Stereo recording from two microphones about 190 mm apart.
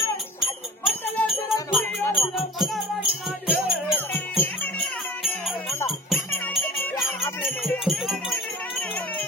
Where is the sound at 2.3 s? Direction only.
Centre (ahead or behind).